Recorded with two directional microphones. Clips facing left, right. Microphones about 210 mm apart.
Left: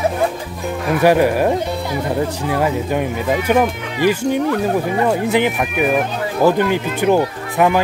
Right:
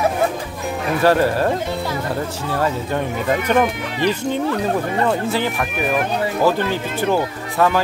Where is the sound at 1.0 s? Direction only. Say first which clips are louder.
Left 3 dB; 15° left (ahead or behind).